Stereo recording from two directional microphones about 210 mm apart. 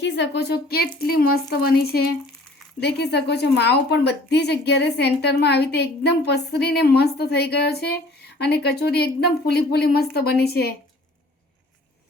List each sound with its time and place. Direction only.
0.0 s a woman's voice: 55° left (ahead or behind)